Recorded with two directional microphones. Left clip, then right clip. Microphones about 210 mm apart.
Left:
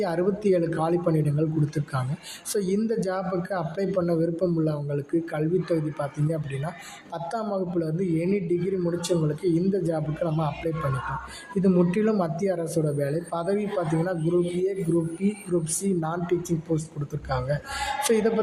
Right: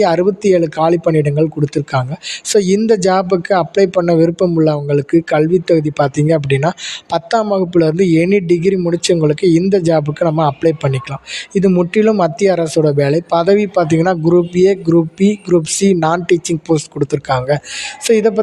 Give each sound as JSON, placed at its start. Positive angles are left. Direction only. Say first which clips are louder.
{"t": 0.0, "sound": "a man's voice", "louder": "right 13 dB", "side_deg": -40}